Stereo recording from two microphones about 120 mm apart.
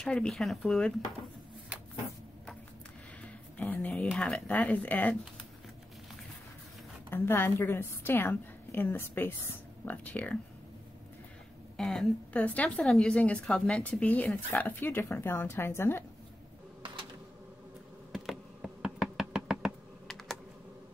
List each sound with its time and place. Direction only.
0.0 s speech: 5° left (ahead or behind)
3.5 s a sound: 15° left (ahead or behind)
3.9 s a woman's voice: 5° left (ahead or behind)
7.1 s a woman's voice: 20° left (ahead or behind)
11.7 s a woman's voice: 5° left (ahead or behind); by 16.0 s 20° left (ahead or behind)
18.1 s knock: centre (ahead or behind)